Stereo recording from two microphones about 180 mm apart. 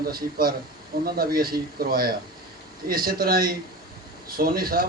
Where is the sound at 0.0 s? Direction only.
55° right (ahead or behind).